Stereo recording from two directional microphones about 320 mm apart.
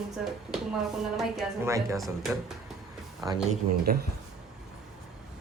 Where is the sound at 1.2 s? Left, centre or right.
Centre.